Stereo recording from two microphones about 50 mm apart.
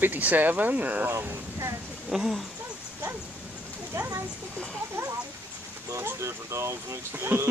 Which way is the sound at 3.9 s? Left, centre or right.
Right.